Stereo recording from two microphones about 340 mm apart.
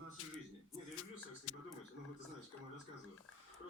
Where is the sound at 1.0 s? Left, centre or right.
Left.